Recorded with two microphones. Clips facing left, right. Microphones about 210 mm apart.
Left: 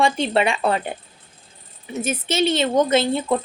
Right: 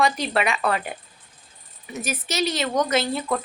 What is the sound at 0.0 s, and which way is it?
A woman's voice, 30° left (ahead or behind).